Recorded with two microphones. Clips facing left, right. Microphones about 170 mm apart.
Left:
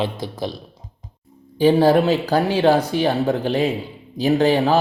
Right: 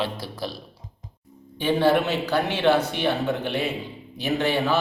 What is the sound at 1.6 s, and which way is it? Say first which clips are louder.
Speech: left 6 dB; 40° left (ahead or behind).